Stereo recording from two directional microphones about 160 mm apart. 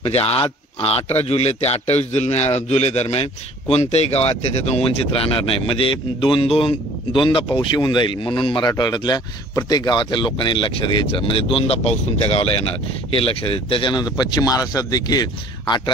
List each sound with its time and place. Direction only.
0.0 s speech: 40° left (ahead or behind)